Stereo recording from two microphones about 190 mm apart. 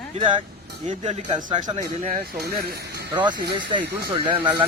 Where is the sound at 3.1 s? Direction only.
25° right (ahead or behind).